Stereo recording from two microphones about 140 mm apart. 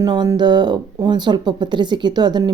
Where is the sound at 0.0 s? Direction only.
30° right (ahead or behind).